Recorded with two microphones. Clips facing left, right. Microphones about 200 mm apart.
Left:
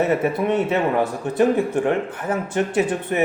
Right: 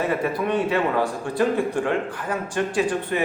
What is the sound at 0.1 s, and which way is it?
A man's voice, 25° left (ahead or behind).